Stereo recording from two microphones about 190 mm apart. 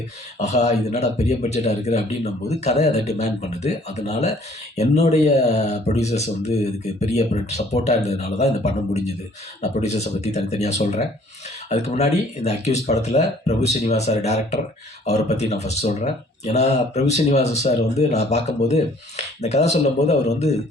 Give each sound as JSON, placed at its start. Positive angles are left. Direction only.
{"t": 0.3, "sound": "speech", "side_deg": 35}